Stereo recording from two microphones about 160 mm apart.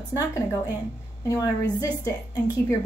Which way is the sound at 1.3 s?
20° left (ahead or behind).